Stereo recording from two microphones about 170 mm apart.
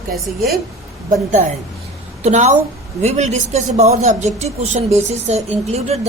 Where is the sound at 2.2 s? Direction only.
45° right (ahead or behind).